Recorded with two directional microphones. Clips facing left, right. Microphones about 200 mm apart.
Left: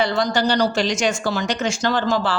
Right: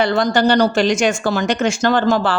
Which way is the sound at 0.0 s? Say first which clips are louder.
Right 4 dB; 55° right (ahead or behind).